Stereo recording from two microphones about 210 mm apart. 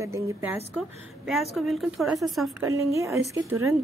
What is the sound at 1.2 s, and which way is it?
A woman's voice, centre (ahead or behind).